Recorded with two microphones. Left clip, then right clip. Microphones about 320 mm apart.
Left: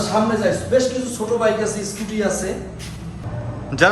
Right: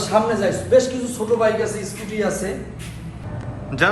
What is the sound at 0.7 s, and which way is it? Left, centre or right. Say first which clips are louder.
Speech: right 3 dB; right.